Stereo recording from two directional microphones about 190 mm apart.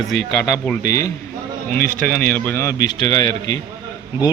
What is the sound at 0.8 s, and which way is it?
Speech, 15° left (ahead or behind).